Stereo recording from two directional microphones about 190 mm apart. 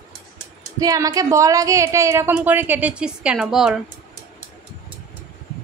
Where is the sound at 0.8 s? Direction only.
20° right (ahead or behind); by 3.8 s centre (ahead or behind).